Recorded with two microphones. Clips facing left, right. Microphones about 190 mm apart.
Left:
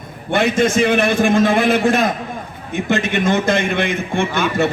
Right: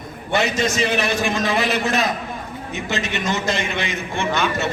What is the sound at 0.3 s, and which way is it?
A man's voice, 55° left (ahead or behind).